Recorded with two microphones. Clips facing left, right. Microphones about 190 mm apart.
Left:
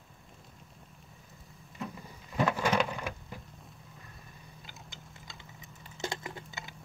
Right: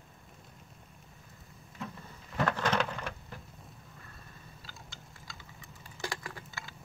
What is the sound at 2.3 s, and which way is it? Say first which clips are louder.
Thunder: left 2 dB; 10° left (ahead or behind).